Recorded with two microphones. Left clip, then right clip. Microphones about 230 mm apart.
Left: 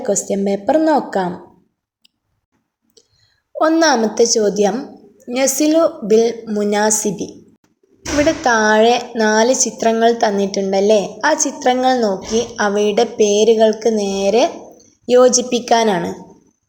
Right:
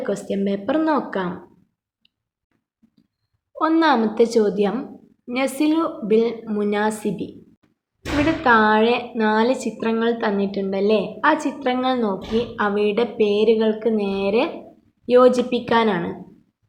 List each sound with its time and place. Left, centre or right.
0.0 s a woman's voice: centre
3.6 s a woman's voice: centre
8.4 s a woman's voice: centre